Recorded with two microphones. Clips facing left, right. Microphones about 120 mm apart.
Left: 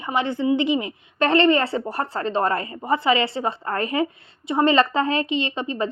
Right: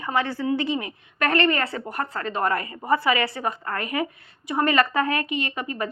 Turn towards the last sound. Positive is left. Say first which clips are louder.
# left 4 dB
turn(degrees=25)  # may be behind; listen again after turning